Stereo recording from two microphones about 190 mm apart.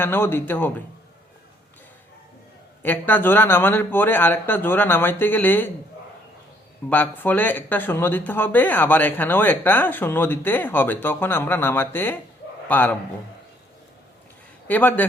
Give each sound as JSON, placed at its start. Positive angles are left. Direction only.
{"t": 0.0, "sound": "speech", "side_deg": 10}
{"t": 2.8, "sound": "speech", "side_deg": 10}
{"t": 6.9, "sound": "a man's voice", "side_deg": 10}
{"t": 14.7, "sound": "speech", "side_deg": 10}